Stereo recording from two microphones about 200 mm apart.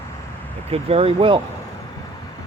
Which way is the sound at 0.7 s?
30° right (ahead or behind).